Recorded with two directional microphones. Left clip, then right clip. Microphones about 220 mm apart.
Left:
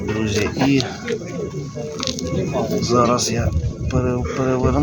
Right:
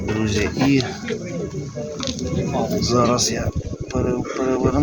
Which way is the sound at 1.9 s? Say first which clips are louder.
Left 3 dB; 50° left (ahead or behind).